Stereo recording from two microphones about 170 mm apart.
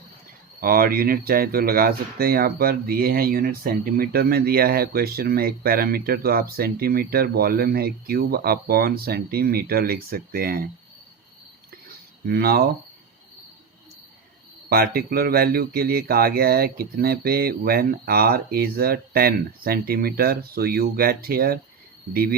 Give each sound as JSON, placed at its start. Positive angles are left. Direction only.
{"t": 0.6, "sound": "speech", "side_deg": -60}
{"t": 12.2, "sound": "speech", "side_deg": -65}
{"t": 14.7, "sound": "speech", "side_deg": -65}